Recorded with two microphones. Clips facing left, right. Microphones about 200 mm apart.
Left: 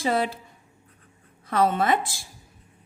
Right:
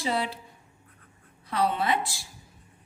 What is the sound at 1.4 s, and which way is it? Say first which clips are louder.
Speech: left 4 dB; 45° left (ahead or behind).